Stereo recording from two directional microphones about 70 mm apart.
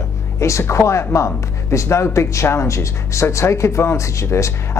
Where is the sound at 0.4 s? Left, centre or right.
Left.